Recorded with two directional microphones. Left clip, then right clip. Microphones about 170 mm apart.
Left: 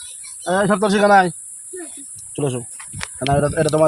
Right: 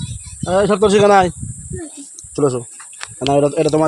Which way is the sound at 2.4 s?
35° right (ahead or behind).